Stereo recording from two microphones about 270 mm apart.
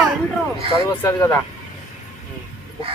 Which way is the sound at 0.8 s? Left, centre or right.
Centre.